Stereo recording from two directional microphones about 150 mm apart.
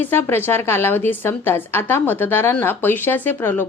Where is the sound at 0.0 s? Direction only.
15° left (ahead or behind).